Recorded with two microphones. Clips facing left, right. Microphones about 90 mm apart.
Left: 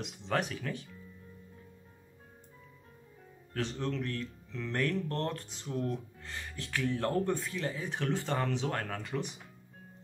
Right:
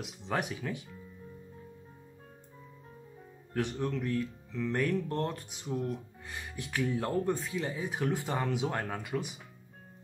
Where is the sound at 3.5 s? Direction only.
15° right (ahead or behind).